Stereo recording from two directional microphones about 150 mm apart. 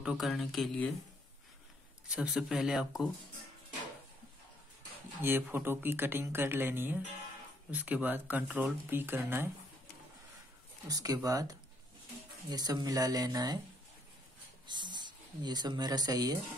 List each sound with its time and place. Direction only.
0.2 s speech: centre (ahead or behind)
2.0 s speech: 5° right (ahead or behind)
5.2 s speech: 15° right (ahead or behind)
10.9 s speech: 25° right (ahead or behind)
14.7 s speech: 30° right (ahead or behind)